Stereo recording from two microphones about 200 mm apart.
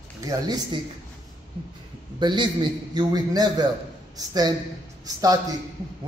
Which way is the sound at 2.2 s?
25° right (ahead or behind).